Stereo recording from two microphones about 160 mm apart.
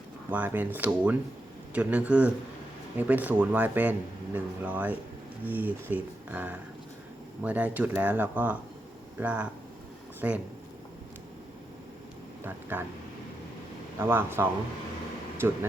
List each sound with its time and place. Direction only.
0.3 s speech: 10° right (ahead or behind)
12.5 s speech: 10° right (ahead or behind)
14.0 s speech: 15° right (ahead or behind)
15.4 s speech: 15° right (ahead or behind)